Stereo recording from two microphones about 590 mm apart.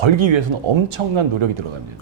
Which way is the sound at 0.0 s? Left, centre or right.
Right.